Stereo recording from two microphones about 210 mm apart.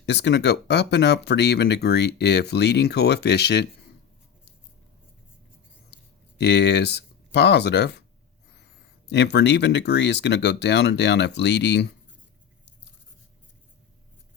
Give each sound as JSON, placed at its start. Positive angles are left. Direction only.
{"t": 0.0, "sound": "speech", "side_deg": 55}
{"t": 6.4, "sound": "speech", "side_deg": 55}
{"t": 9.0, "sound": "speech", "side_deg": 55}